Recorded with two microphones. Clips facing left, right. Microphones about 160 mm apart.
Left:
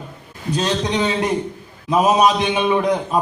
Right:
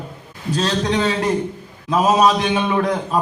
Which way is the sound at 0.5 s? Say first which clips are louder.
Right 1 dB; 20° left (ahead or behind).